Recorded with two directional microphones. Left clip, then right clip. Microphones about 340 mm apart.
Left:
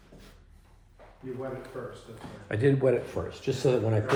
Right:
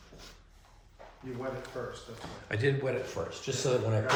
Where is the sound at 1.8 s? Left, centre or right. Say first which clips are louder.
Even; centre.